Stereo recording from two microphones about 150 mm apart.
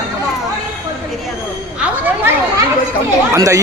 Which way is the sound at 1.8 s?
10° right (ahead or behind).